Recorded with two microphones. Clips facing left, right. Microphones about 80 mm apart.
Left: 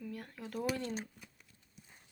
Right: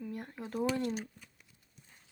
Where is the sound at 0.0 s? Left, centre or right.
Right.